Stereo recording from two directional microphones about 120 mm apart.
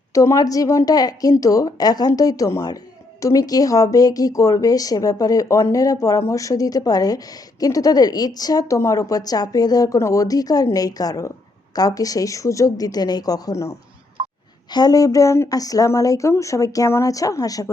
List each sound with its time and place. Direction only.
0.1 s a woman's voice: 25° left (ahead or behind)
14.2 s a sound: 45° right (ahead or behind)
14.7 s a woman's voice: 35° left (ahead or behind)